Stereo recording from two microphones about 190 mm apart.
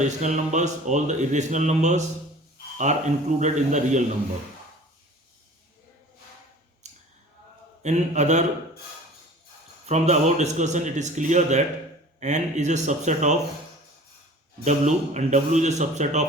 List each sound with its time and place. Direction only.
0.0 s speech: 40° right (ahead or behind)
6.8 s a sound: 35° right (ahead or behind)
7.8 s speech: 35° right (ahead or behind)
9.8 s speech: 35° right (ahead or behind)
14.6 s speech: 40° right (ahead or behind)